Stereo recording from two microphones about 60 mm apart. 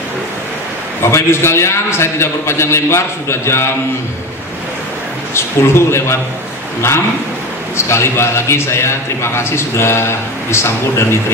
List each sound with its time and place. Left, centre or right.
1.0 s a man's voice: left
5.3 s a man's voice: left
7.7 s a man's voice: left